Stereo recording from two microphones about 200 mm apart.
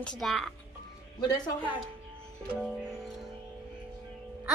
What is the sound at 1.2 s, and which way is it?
Speech, 20° left (ahead or behind).